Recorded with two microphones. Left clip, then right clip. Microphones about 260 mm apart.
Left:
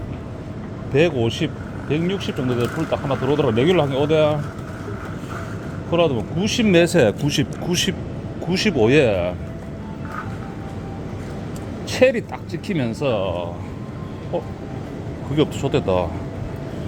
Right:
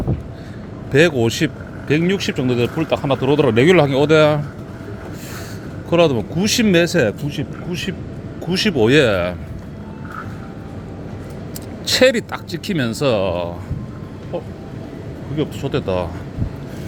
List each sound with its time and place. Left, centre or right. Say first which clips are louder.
0.9 s speech: right 4 dB; right
5.9 s speech: right 4 dB; right
6.7 s speech: left 2 dB; centre
7.3 s speech: left 4 dB; centre
8.4 s speech: right 2 dB; centre
11.9 s speech: right 3 dB; centre
15.4 s speech: left 2 dB; centre